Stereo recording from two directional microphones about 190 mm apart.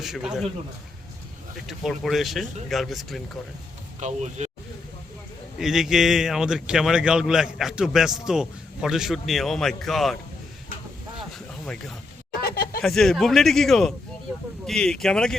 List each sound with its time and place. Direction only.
0.0 s speech: 5° right (ahead or behind)
1.5 s speech: centre (ahead or behind)
4.0 s speech: 35° right (ahead or behind)
5.5 s speech: centre (ahead or behind)
11.3 s a sound: 5° left (ahead or behind)
12.4 s a sound: 50° left (ahead or behind)
12.8 s speech: centre (ahead or behind)